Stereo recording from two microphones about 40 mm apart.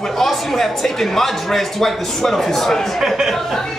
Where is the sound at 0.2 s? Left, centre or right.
Centre.